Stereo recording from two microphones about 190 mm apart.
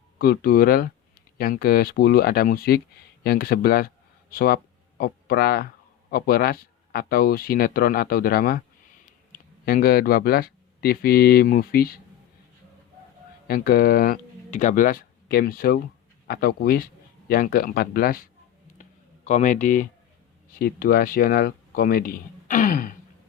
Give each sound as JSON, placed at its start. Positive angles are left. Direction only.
{"t": 0.2, "sound": "speech", "side_deg": 50}
{"t": 9.6, "sound": "speech", "side_deg": 50}
{"t": 13.5, "sound": "speech", "side_deg": 50}
{"t": 18.8, "sound": "a sound", "side_deg": 40}
{"t": 20.6, "sound": "speech", "side_deg": 50}